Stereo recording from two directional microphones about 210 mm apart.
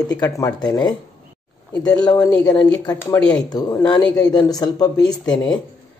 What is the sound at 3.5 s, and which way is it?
Speech, 20° left (ahead or behind).